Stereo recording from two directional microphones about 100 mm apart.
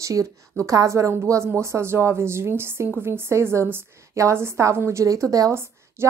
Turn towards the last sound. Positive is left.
turn(degrees=-30)  # may be behind; listen again after turning